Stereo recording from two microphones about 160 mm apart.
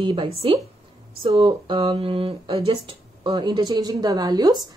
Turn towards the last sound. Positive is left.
turn(degrees=-25)  # may be behind; listen again after turning